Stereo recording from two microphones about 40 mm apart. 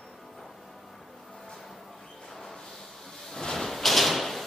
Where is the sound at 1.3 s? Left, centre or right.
Centre.